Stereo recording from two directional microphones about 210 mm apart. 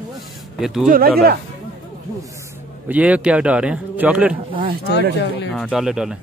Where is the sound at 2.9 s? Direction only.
5° right (ahead or behind).